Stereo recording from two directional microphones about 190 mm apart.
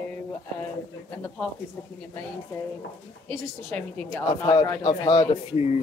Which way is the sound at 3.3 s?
10° left (ahead or behind).